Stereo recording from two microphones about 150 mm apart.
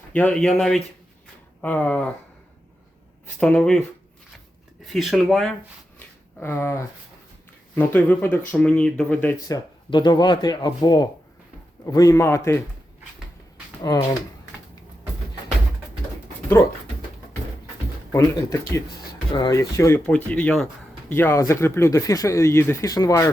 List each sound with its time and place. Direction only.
0.1 s speech: 10° left (ahead or behind)
3.4 s speech: 5° left (ahead or behind)
6.0 s a sound: 15° left (ahead or behind)
7.8 s speech: 10° left (ahead or behind)
9.5 s speech: 30° left (ahead or behind)
13.8 s speech: 25° left (ahead or behind)
18.1 s speech: 20° left (ahead or behind)